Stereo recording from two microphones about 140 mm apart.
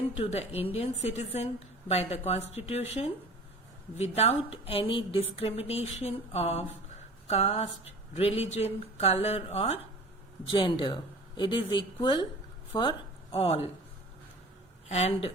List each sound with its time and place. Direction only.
0.2 s a woman's voice: 50° left (ahead or behind)
10.5 s speech: 35° left (ahead or behind)
13.3 s a woman's voice: 45° left (ahead or behind)
14.8 s speech: 50° left (ahead or behind)